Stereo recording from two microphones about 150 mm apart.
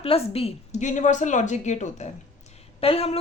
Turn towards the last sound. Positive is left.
turn(degrees=40)  # may be behind; listen again after turning